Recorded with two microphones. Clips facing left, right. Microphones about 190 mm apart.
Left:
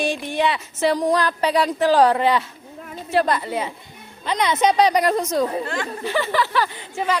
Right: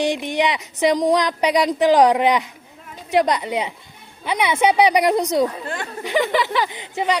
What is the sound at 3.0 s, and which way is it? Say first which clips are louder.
Speech: right 2 dB; 15° right (ahead or behind).